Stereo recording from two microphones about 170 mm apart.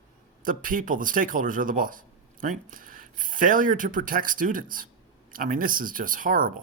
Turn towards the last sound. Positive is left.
turn(degrees=-55)  # may be behind; listen again after turning